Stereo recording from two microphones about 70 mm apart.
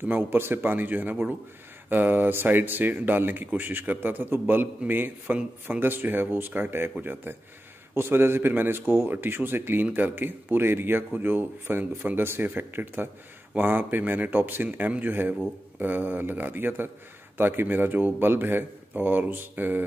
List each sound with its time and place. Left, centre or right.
0.1 s speech: right